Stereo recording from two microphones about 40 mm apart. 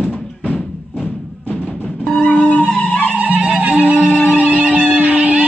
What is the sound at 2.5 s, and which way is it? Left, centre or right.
Music, left.